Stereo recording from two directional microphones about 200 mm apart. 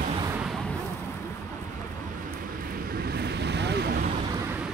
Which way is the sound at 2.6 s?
45° right (ahead or behind).